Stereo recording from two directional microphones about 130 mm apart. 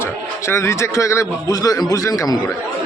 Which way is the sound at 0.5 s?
20° left (ahead or behind).